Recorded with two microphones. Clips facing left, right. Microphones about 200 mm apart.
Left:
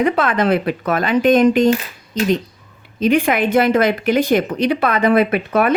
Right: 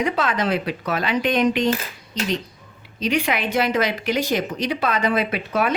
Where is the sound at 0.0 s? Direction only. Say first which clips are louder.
Left 6 dB; 55° left (ahead or behind).